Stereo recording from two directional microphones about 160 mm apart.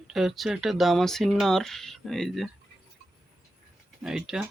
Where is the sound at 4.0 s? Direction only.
5° right (ahead or behind).